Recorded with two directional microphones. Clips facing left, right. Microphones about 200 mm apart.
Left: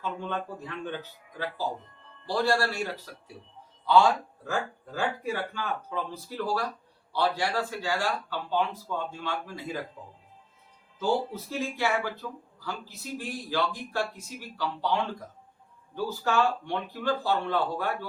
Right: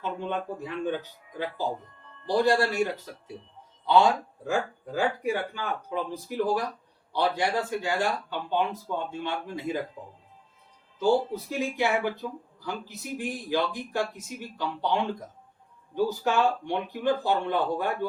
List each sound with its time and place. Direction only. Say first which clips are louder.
0.0 s a man's voice: right 2 dB; 15° right (ahead or behind)
4.4 s a man's voice: right 4 dB; 15° right (ahead or behind)